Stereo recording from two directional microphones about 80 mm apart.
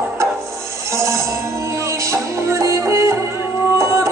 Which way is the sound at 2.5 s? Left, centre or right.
Right.